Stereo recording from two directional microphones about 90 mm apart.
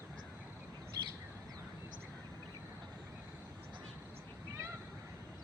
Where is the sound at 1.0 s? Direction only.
50° right (ahead or behind).